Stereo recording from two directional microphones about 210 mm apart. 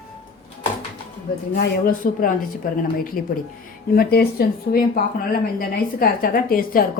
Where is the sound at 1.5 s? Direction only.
40° left (ahead or behind).